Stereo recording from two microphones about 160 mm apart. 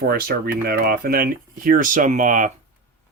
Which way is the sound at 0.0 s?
65° right (ahead or behind).